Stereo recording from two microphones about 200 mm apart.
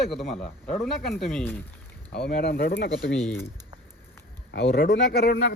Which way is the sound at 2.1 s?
50° left (ahead or behind).